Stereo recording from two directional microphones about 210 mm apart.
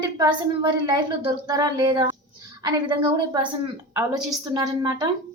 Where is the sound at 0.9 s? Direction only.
20° right (ahead or behind).